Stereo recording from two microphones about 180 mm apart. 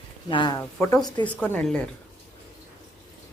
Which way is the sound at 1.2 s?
10° left (ahead or behind).